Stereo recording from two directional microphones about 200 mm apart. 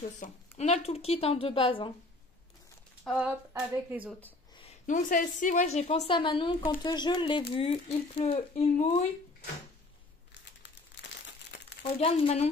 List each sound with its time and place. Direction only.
0.2 s a woman's voice: 35° left (ahead or behind)
3.2 s hands: 5° right (ahead or behind)
4.8 s a woman's voice: 40° left (ahead or behind)
11.0 s crumpling: 60° left (ahead or behind)
11.8 s a woman's voice: 30° left (ahead or behind)